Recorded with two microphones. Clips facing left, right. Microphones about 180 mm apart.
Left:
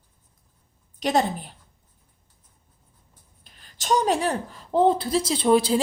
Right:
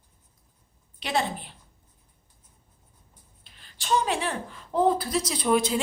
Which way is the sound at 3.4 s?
45° left (ahead or behind).